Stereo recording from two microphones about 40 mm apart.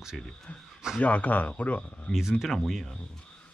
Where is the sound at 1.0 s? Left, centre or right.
Left.